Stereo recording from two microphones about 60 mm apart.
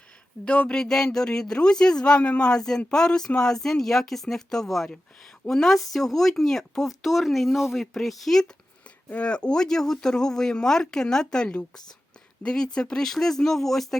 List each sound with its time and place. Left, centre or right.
0.4 s speech: centre
9.0 s speech: centre